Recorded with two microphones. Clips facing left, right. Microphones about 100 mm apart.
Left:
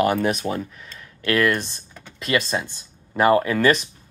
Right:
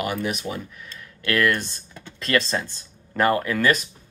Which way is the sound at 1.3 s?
25° left (ahead or behind).